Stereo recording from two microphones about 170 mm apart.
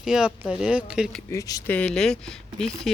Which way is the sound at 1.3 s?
20° left (ahead or behind).